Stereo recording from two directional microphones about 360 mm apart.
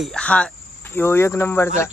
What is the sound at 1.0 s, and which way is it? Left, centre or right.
Cricket, centre.